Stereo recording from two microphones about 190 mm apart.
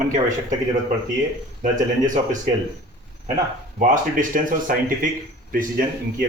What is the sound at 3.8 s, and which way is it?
Speech, 45° right (ahead or behind).